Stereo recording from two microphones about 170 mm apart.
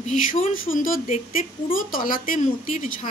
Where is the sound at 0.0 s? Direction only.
45° left (ahead or behind).